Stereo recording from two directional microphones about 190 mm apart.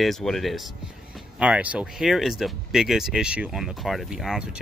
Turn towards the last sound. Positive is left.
turn(degrees=0)  # may be behind; listen again after turning